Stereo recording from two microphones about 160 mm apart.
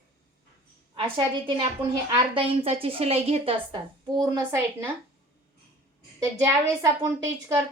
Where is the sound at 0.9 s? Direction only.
30° right (ahead or behind).